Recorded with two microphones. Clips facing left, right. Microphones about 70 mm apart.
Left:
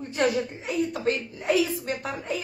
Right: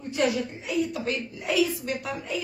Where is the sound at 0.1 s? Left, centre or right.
Left.